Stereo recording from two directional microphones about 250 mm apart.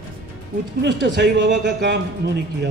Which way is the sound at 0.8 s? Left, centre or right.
Right.